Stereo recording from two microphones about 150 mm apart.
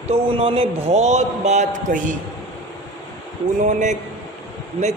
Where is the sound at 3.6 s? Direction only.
55° right (ahead or behind).